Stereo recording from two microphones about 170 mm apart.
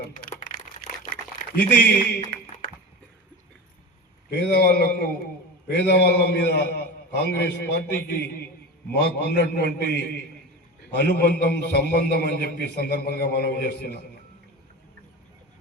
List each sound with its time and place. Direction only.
0.3 s crumpling: 50° left (ahead or behind)
1.7 s speech: 70° left (ahead or behind)
4.3 s a man's voice: 70° left (ahead or behind)
11.2 s a man's voice: 70° left (ahead or behind)